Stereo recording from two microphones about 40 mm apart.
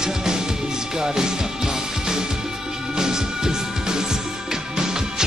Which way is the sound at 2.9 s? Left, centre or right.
Centre.